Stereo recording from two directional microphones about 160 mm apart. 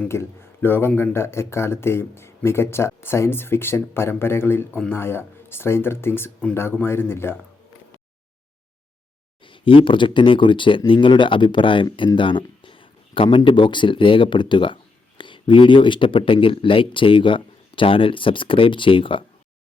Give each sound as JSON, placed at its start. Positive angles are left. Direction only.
{"t": 0.0, "sound": "speech", "side_deg": 15}
{"t": 9.4, "sound": "speech", "side_deg": 35}